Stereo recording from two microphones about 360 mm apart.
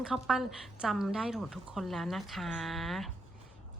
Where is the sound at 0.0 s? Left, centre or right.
Centre.